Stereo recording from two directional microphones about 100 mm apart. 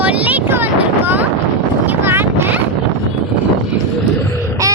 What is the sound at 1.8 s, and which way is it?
Boat, 20° right (ahead or behind).